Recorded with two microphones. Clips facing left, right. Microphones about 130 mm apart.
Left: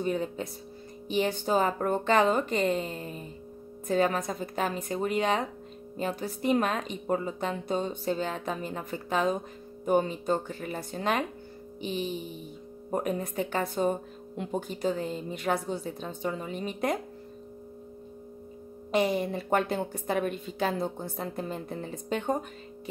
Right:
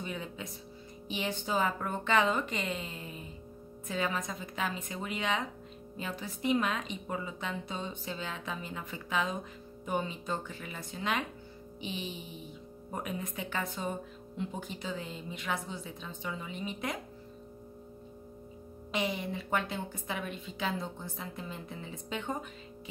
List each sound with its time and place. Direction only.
0.0 s speech: 40° left (ahead or behind)
18.9 s speech: 45° left (ahead or behind)